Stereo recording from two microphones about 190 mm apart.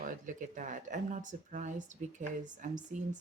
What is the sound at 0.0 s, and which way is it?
Speech, 45° right (ahead or behind).